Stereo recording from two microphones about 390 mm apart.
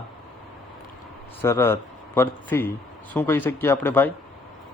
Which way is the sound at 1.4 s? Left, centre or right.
Centre.